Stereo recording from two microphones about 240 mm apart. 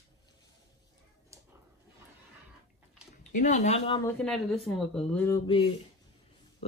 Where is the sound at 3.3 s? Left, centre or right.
Left.